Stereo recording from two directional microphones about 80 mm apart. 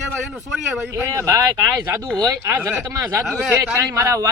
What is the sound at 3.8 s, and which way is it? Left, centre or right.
Speech, right.